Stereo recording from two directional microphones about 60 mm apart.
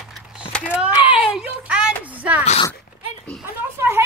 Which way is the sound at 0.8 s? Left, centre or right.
Right.